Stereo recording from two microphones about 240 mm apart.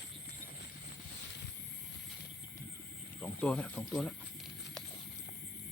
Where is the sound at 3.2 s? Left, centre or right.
Centre.